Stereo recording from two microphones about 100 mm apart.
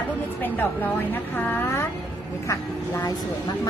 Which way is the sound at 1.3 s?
20° left (ahead or behind).